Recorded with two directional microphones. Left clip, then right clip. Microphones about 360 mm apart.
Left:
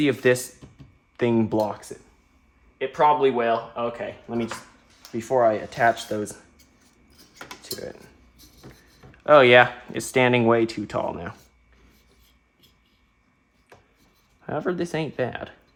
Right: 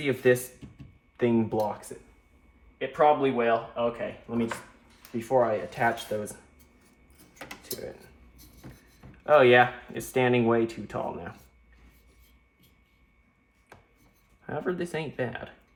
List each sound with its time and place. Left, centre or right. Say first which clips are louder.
0.0 s speech: left 4 dB; left
2.7 s speech: left 3 dB; left
9.2 s speech: left 5 dB; left
14.4 s speech: left 5 dB; left